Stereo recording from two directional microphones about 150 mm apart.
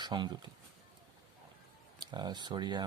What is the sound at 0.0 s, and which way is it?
Speech, 30° right (ahead or behind).